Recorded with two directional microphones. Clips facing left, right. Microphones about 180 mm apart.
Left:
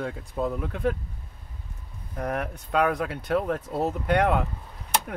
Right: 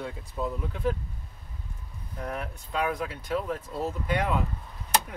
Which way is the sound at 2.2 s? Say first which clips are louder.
Left 5 dB; 65° left (ahead or behind).